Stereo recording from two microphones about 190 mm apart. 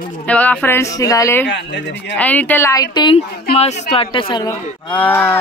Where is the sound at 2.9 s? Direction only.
25° left (ahead or behind).